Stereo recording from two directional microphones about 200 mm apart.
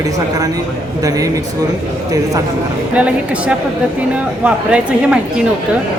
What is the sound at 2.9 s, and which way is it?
A woman's voice, 5° right (ahead or behind).